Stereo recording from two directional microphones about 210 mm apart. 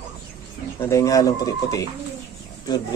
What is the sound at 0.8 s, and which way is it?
Speech, 15° left (ahead or behind).